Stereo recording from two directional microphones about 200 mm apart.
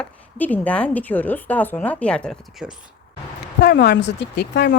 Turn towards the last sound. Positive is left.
turn(degrees=55)  # may be behind; listen again after turning